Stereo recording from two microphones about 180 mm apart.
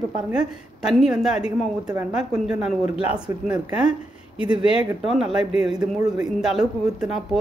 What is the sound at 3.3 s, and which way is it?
Speech, 15° right (ahead or behind).